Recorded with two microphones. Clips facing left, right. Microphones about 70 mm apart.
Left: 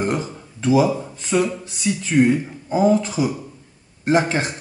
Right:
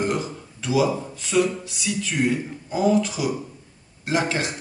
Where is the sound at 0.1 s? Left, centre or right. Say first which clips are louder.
Left 2 dB; left.